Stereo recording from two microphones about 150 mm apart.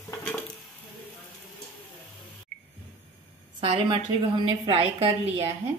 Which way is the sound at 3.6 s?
35° right (ahead or behind).